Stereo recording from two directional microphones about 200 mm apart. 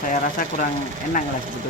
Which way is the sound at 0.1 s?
40° left (ahead or behind).